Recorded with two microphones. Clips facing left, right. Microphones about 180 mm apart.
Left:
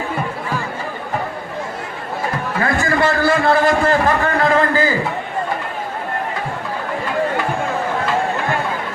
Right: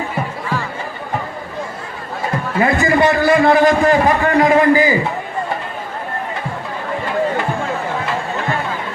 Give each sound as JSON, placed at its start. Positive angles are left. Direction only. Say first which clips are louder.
{"t": 2.6, "sound": "a man's voice", "louder": "right 4 dB", "side_deg": -20}